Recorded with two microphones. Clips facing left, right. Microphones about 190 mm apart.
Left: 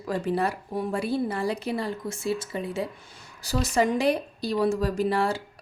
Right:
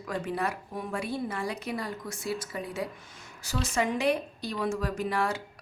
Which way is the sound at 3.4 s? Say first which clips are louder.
Left 5 dB; 35° left (ahead or behind).